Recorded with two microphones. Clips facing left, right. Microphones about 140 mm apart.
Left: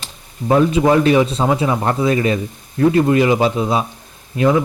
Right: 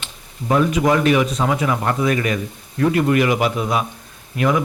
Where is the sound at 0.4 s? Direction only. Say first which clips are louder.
Left 3 dB; 25° left (ahead or behind).